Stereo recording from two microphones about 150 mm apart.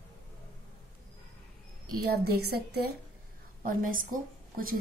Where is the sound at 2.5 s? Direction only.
90° right.